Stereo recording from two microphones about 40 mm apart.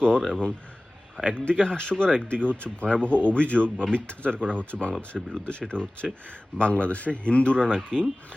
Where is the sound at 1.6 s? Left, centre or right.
Left.